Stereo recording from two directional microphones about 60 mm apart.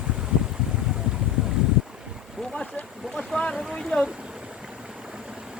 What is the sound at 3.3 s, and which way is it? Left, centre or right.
Speech, centre.